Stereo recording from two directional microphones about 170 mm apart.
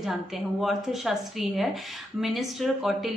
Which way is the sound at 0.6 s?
Centre (ahead or behind).